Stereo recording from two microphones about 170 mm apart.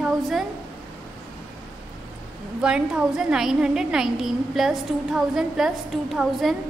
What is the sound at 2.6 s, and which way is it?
A woman's voice, 5° right (ahead or behind).